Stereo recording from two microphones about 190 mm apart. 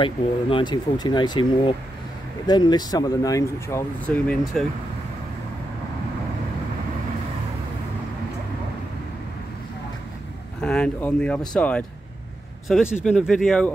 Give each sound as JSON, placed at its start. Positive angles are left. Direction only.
{"t": 0.0, "sound": "speech", "side_deg": 25}
{"t": 10.6, "sound": "speech", "side_deg": 5}